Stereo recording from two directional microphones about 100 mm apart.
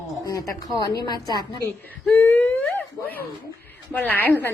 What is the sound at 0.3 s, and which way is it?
Speech, 35° left (ahead or behind).